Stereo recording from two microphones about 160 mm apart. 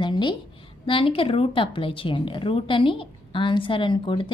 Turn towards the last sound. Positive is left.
turn(degrees=30)  # may be behind; listen again after turning